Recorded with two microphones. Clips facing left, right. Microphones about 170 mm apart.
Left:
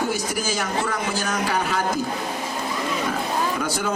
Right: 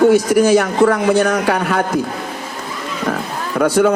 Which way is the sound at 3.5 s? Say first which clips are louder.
Right 12 dB; 60° right (ahead or behind).